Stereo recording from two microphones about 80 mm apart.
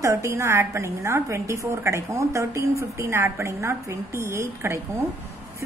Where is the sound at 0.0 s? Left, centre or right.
Right.